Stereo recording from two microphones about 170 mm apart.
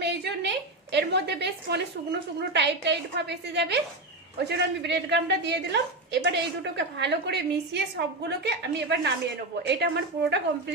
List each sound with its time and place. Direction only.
0.0 s a woman's voice: 85° right
4.4 s a woman's voice: 75° right (ahead or behind)